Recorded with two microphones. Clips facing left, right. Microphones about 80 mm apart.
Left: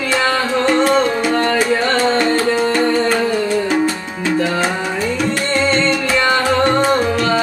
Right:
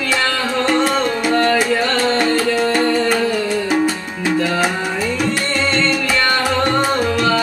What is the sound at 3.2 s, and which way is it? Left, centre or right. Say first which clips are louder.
Music: left 2 dB; left.